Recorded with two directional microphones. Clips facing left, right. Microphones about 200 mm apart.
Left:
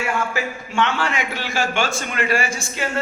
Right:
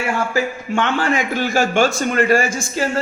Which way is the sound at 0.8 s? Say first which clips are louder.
Right 3 dB; 45° right (ahead or behind).